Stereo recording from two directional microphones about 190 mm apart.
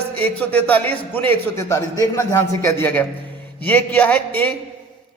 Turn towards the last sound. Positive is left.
turn(degrees=10)  # may be behind; listen again after turning